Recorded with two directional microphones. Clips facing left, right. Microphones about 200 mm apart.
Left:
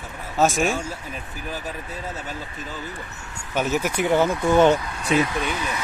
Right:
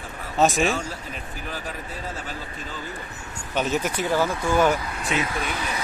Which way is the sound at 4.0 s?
20° left (ahead or behind).